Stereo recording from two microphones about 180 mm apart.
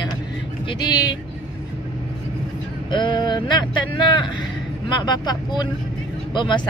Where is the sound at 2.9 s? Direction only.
25° left (ahead or behind).